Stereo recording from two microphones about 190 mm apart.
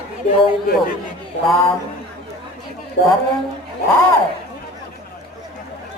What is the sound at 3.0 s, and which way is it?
Speech, 65° left (ahead or behind).